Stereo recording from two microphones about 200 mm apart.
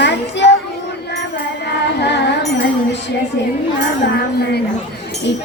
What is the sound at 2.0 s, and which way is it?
Music, 60° left (ahead or behind).